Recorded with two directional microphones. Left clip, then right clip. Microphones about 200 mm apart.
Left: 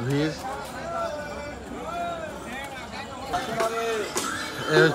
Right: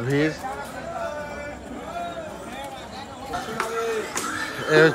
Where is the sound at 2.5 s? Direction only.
Centre (ahead or behind).